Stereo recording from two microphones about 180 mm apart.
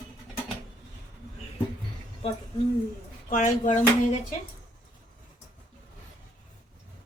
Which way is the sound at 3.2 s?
45° left (ahead or behind).